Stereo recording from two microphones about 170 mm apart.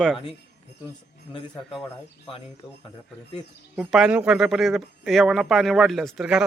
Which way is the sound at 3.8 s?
5° right (ahead or behind).